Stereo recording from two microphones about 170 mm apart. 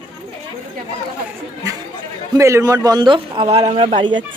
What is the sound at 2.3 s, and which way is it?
A man's voice, 15° right (ahead or behind).